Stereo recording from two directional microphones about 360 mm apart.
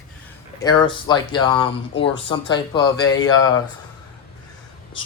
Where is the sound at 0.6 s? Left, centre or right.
Centre.